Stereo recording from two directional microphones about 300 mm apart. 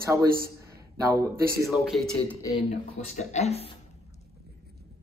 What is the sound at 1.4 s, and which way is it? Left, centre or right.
Speech, right.